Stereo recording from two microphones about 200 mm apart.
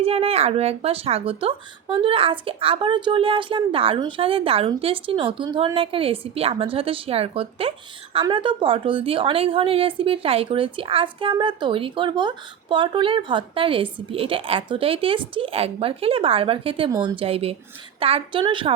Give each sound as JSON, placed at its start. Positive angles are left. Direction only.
{"t": 0.0, "sound": "a woman's voice", "side_deg": -30}